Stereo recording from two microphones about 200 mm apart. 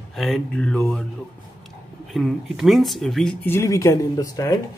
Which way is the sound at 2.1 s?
Centre (ahead or behind).